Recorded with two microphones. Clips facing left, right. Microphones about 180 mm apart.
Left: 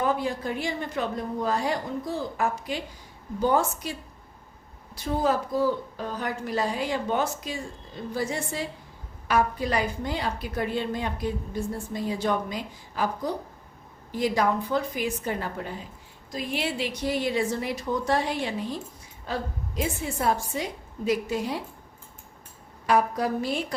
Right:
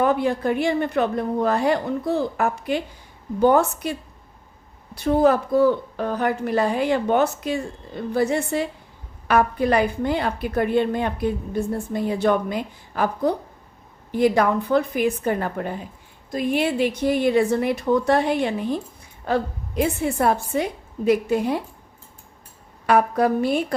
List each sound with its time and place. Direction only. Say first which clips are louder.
0.0 s a woman's voice: right 7 dB; 65° right (ahead or behind)
4.9 s a woman's voice: right 8 dB; 60° right (ahead or behind)
22.9 s a woman's voice: right 5 dB; 60° right (ahead or behind)